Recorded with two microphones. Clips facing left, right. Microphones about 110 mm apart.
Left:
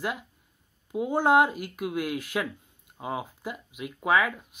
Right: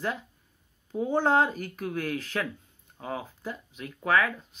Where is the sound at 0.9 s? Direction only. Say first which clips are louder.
Left 2 dB; 10° left (ahead or behind).